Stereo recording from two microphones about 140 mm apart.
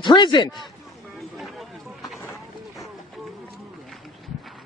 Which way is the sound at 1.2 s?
Centre (ahead or behind).